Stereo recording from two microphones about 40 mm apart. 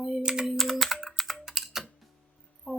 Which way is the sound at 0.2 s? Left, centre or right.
Centre.